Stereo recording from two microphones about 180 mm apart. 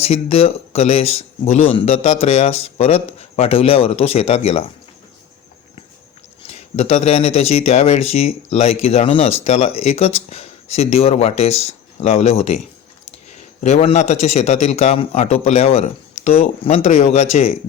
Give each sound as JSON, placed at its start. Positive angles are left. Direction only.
{"t": 0.0, "sound": "speech", "side_deg": 35}
{"t": 6.4, "sound": "speech", "side_deg": 35}
{"t": 13.6, "sound": "speech", "side_deg": 40}